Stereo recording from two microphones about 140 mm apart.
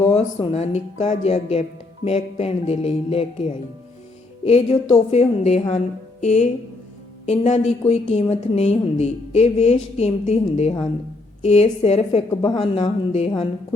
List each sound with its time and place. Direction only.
0.0 s a woman's voice: 50° left (ahead or behind)